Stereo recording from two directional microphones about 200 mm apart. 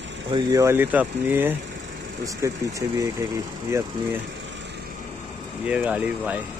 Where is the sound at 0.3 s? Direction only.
15° right (ahead or behind).